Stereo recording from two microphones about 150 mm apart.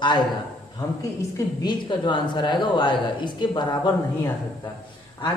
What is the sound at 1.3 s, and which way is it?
A woman's voice, 30° left (ahead or behind).